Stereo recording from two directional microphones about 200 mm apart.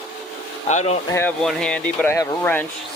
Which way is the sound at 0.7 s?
35° left (ahead or behind).